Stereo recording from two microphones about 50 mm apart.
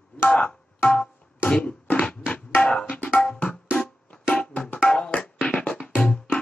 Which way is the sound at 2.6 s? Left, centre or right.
Centre.